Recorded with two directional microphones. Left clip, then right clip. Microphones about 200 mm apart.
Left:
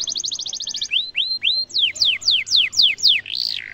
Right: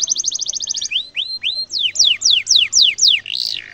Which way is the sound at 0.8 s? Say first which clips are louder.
Left 3 dB; 30° left (ahead or behind).